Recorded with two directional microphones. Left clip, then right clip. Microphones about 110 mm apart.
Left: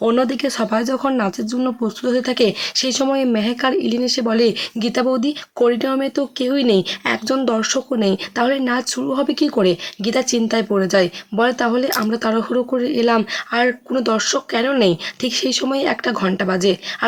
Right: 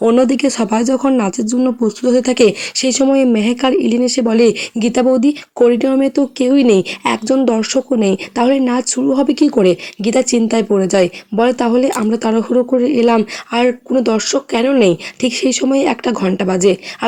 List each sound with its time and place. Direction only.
0.0 s speech: 35° right (ahead or behind)